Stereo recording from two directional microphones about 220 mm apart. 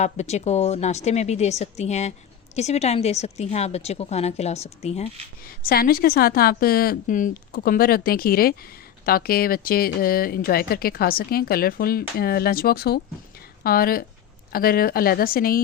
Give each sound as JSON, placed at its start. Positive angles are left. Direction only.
{"t": 0.0, "sound": "a woman's voice", "side_deg": 30}
{"t": 5.6, "sound": "speech", "side_deg": 45}